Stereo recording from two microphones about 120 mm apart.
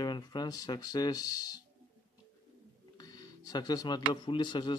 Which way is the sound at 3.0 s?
30° left (ahead or behind).